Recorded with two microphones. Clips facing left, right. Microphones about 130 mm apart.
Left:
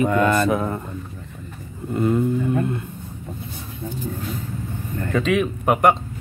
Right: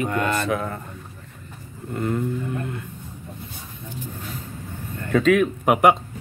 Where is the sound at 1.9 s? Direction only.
20° left (ahead or behind).